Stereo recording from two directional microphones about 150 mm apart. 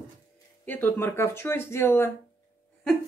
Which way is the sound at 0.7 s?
15° left (ahead or behind).